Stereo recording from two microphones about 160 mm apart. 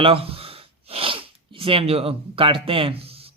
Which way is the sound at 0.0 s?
35° right (ahead or behind).